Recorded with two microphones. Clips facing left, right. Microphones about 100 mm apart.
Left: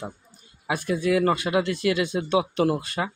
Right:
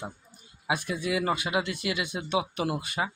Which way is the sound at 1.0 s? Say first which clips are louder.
Left 7 dB; 10° right (ahead or behind).